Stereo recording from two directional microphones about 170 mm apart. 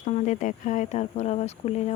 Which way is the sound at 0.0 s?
45° left (ahead or behind).